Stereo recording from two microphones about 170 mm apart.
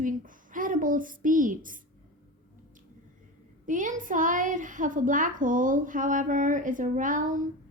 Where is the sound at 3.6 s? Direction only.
50° right (ahead or behind).